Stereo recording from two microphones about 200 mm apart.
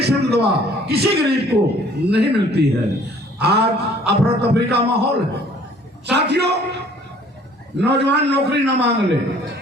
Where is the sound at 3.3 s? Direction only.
55° right (ahead or behind).